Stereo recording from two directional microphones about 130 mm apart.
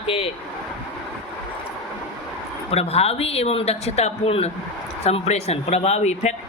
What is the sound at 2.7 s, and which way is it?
Speech, 50° left (ahead or behind).